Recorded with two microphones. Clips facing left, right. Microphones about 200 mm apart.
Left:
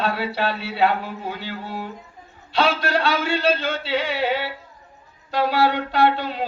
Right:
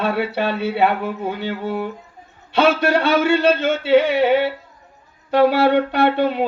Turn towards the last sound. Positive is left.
turn(degrees=-60)  # may be behind; listen again after turning